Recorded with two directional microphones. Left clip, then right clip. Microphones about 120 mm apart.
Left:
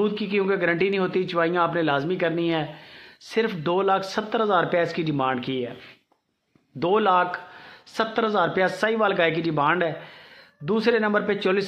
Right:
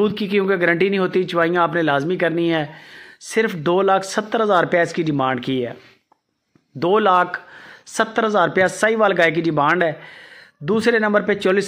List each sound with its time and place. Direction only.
0.0 s speech: 45° right (ahead or behind)
6.8 s speech: 40° right (ahead or behind)